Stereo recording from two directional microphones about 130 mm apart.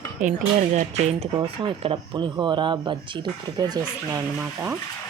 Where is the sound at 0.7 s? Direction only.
60° right (ahead or behind).